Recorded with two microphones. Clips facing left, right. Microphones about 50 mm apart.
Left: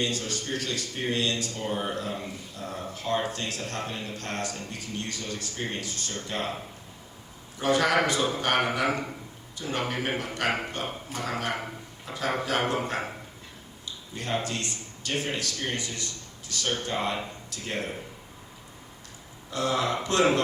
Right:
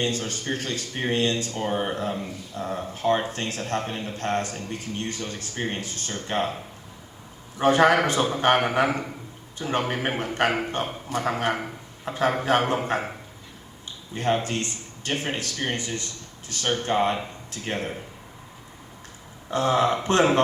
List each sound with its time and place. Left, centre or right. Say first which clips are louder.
0.0 s a man's voice: right 3 dB; right
7.6 s a man's voice: right 5 dB; right
13.8 s a sound: right 9 dB; right
14.3 s a man's voice: right 3 dB; right
19.5 s a man's voice: right 5 dB; right